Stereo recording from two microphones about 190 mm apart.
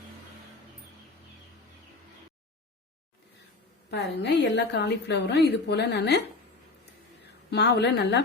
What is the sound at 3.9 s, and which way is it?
A woman's voice, 65° left (ahead or behind).